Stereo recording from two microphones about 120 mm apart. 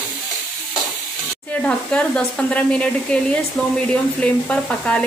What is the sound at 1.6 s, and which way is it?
Speech, 10° left (ahead or behind).